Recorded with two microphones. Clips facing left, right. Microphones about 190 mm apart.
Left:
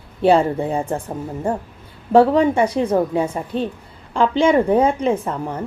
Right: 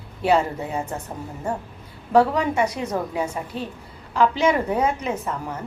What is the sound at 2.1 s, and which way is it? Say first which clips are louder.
A woman's voice: left 5 dB; 30° left (ahead or behind).